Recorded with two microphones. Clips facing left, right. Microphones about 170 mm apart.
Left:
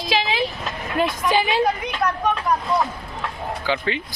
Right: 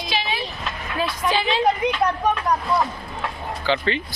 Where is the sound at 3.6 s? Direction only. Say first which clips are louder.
Right 2 dB; 10° left (ahead or behind).